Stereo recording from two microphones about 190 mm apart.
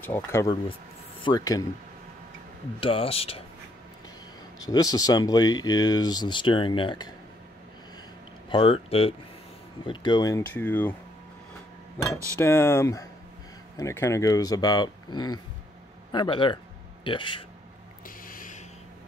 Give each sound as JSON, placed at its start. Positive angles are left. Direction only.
{"t": 0.0, "sound": "speech", "side_deg": 10}
{"t": 2.8, "sound": "speech", "side_deg": 30}
{"t": 4.6, "sound": "speech", "side_deg": 20}
{"t": 8.5, "sound": "speech", "side_deg": 30}
{"t": 12.4, "sound": "speech", "side_deg": 15}
{"t": 18.0, "sound": "a sound", "side_deg": 45}